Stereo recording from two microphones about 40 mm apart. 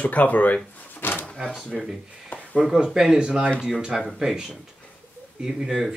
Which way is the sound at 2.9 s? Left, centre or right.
Centre.